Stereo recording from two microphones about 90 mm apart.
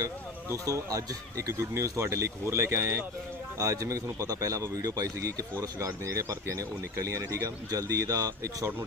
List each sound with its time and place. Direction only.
0.0 s speech: 40° right (ahead or behind)